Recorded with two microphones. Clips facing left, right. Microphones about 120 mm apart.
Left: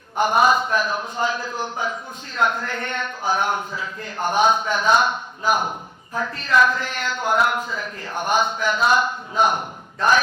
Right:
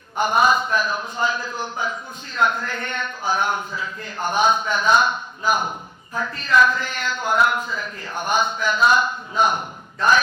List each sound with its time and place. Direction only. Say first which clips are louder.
0.2 s a man's voice: left 1 dB; 60° left (ahead or behind)